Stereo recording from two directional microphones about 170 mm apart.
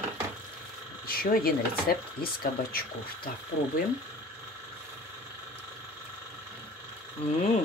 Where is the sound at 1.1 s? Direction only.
60° left (ahead or behind).